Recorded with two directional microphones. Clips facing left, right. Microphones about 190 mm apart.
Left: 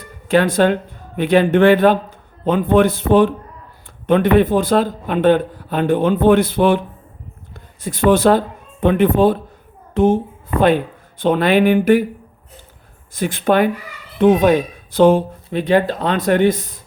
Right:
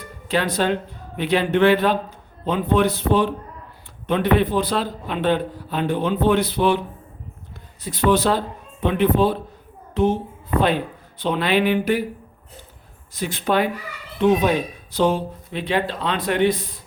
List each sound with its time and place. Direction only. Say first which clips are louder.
0.3 s a man's voice: left 7 dB; 50° left (ahead or behind)
11.2 s a man's voice: left 6 dB; 50° left (ahead or behind)
13.1 s a man's voice: left 5 dB; 50° left (ahead or behind)